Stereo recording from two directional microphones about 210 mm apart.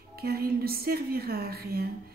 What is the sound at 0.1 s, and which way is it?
A woman's voice, 45° right (ahead or behind).